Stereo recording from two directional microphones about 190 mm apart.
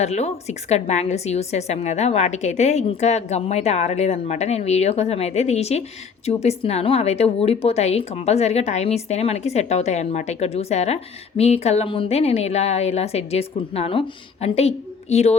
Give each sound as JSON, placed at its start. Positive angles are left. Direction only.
{"t": 0.0, "sound": "speech", "side_deg": 35}